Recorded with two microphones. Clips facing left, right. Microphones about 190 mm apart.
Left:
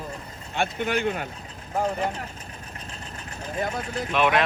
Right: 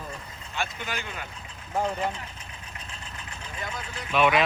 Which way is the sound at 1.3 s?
40° left (ahead or behind).